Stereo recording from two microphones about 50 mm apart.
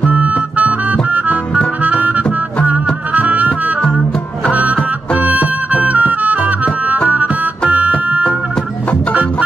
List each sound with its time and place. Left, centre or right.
0.1 s music: right
1.8 s harmonica: right
2.6 s music: right
5.2 s music: right